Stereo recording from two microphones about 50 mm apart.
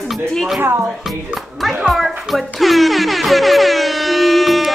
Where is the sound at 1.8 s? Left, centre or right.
Centre.